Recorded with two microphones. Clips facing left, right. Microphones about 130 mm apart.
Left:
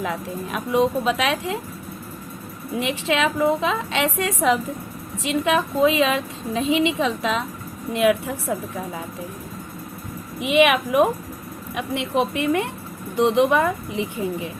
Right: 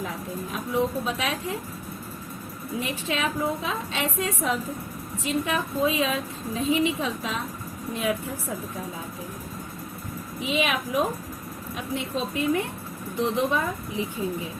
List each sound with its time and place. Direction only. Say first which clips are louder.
0.0 s a woman's voice: left 5 dB; 80° left
2.7 s a woman's voice: left 7 dB; 85° left
7.9 s speech: left 9 dB; 75° left (ahead or behind)
10.4 s speech: left 9 dB; 70° left (ahead or behind)
13.1 s speech: left 7 dB; 70° left (ahead or behind)